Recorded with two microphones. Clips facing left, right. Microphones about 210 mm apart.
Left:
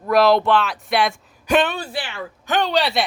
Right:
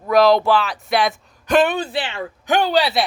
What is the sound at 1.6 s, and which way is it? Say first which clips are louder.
Speech: right 5 dB; 20° right (ahead or behind).